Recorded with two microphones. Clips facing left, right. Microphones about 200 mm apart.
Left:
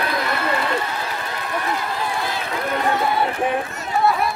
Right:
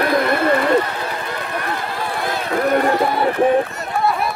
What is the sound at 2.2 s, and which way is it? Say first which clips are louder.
Run: right 6 dB; 50° right (ahead or behind).